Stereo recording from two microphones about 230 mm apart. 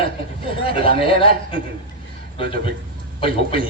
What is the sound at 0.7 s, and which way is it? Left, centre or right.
Speech, left.